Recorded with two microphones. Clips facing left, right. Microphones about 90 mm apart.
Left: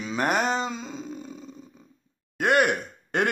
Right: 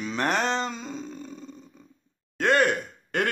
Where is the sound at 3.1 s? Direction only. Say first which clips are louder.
Left 2 dB; 20° left (ahead or behind).